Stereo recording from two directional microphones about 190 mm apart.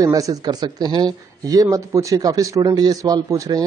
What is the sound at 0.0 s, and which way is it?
Speech, 20° right (ahead or behind).